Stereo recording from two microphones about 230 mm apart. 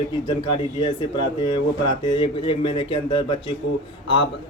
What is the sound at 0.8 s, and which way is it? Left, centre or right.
Speech, centre.